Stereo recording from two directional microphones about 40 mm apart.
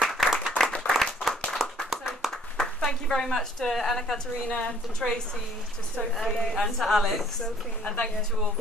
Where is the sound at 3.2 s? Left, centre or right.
Centre.